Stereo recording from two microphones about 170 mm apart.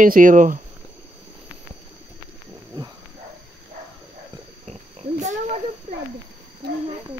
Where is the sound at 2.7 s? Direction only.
25° right (ahead or behind).